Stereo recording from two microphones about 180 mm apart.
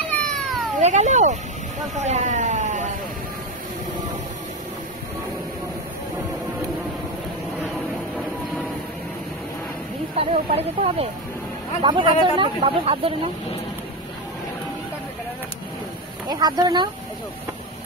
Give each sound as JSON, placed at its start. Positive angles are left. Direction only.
{"t": 0.3, "sound": "cat", "side_deg": 0}
{"t": 0.7, "sound": "speech", "side_deg": -40}
{"t": 10.1, "sound": "speech", "side_deg": -35}
{"t": 16.3, "sound": "speech", "side_deg": -25}